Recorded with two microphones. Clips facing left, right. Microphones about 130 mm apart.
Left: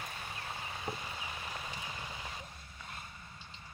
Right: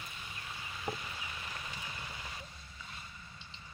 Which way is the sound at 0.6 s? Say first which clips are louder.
Right 3 dB; 35° left (ahead or behind).